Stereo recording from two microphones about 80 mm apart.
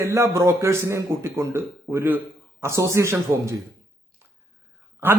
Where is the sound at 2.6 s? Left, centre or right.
Right.